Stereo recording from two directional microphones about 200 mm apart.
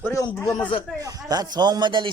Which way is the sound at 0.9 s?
20° right (ahead or behind).